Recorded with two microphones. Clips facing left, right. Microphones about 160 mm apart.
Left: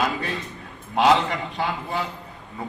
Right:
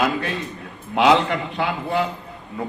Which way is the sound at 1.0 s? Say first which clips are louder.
Right 2 dB; 65° right (ahead or behind).